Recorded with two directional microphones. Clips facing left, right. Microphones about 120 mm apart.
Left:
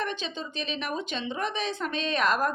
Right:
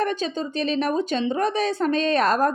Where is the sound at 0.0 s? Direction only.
40° right (ahead or behind).